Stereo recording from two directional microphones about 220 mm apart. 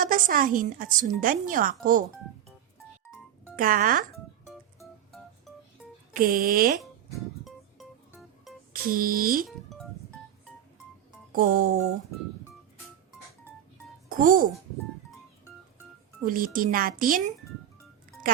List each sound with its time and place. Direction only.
0.0 s a woman's voice: 40° right (ahead or behind)
3.5 s a woman's voice: 40° right (ahead or behind)
6.1 s a woman's voice: 40° right (ahead or behind)
7.4 s music: centre (ahead or behind)
8.7 s a woman's voice: 40° right (ahead or behind)
9.5 s music: centre (ahead or behind)
11.3 s a woman's voice: 40° right (ahead or behind)
14.1 s a child's voice: 40° right (ahead or behind)
16.2 s a woman's voice: 40° right (ahead or behind)